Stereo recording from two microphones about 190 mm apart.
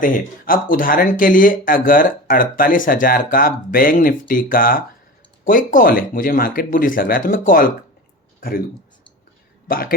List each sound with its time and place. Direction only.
0.0 s speech: 45° left (ahead or behind)
9.6 s a man's voice: 50° left (ahead or behind)